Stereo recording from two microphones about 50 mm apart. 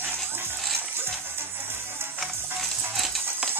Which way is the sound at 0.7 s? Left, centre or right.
Right.